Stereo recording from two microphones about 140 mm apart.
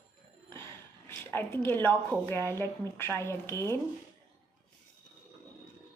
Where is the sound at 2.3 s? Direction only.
15° left (ahead or behind).